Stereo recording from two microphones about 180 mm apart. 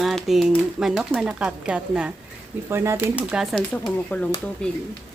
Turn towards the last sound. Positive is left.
turn(degrees=10)  # may be behind; listen again after turning